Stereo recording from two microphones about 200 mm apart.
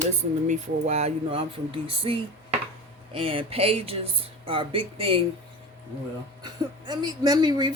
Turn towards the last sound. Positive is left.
turn(degrees=-20)  # may be behind; listen again after turning